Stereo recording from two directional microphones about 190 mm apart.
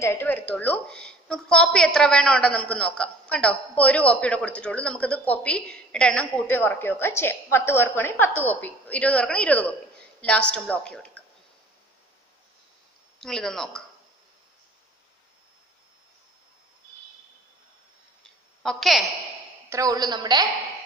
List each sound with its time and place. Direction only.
0.0 s a woman's voice: 10° left (ahead or behind)
13.2 s speech: centre (ahead or behind)
18.6 s speech: centre (ahead or behind)
19.7 s a woman's voice: 20° right (ahead or behind)